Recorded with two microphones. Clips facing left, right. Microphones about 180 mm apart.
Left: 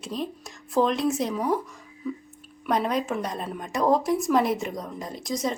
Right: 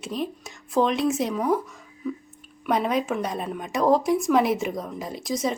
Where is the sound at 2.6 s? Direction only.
5° right (ahead or behind).